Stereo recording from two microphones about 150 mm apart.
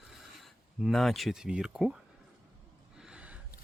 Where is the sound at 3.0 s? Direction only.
5° right (ahead or behind).